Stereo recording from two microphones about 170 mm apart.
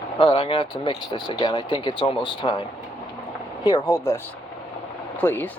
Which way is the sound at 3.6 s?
20° left (ahead or behind).